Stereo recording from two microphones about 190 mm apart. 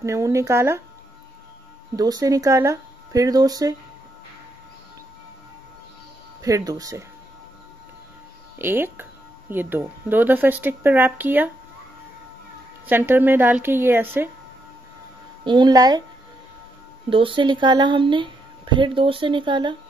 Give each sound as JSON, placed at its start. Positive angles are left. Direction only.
{"t": 0.0, "sound": "speech", "side_deg": -15}
{"t": 2.0, "sound": "speech", "side_deg": -20}
{"t": 6.4, "sound": "speech", "side_deg": -20}
{"t": 8.5, "sound": "speech", "side_deg": -10}
{"t": 12.8, "sound": "speech", "side_deg": -10}
{"t": 15.4, "sound": "speech", "side_deg": -25}
{"t": 17.1, "sound": "speech", "side_deg": -25}